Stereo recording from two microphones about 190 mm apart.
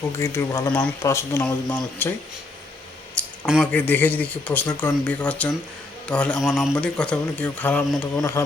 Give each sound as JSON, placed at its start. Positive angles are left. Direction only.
{"t": 0.2, "sound": "speech", "side_deg": 15}
{"t": 3.2, "sound": "speech", "side_deg": 5}